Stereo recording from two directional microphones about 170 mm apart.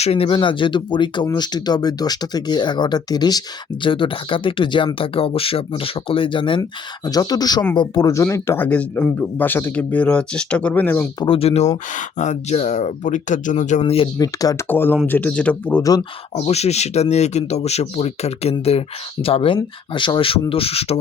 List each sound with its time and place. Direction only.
0.0 s speech: 35° left (ahead or behind); by 11.1 s 10° left (ahead or behind)
11.2 s speech: 30° left (ahead or behind)
14.2 s speech: 20° left (ahead or behind)
16.3 s speech: 40° left (ahead or behind)